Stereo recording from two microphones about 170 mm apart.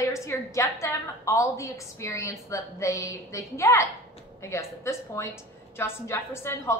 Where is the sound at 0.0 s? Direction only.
15° left (ahead or behind).